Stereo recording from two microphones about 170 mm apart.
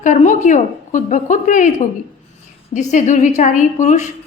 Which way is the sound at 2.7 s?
45° left (ahead or behind).